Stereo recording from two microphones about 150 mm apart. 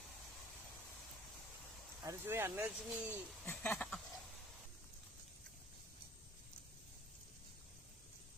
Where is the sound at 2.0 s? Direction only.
15° right (ahead or behind).